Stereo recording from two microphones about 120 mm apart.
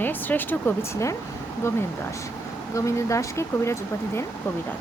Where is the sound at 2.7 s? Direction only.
25° left (ahead or behind).